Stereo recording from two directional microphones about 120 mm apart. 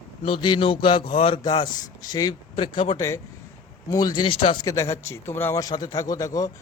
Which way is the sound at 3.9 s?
35° left (ahead or behind).